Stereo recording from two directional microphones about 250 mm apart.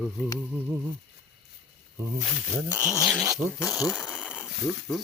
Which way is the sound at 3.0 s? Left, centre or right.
Centre.